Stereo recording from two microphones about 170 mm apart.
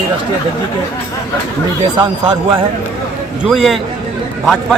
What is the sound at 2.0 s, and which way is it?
Speech, 30° right (ahead or behind).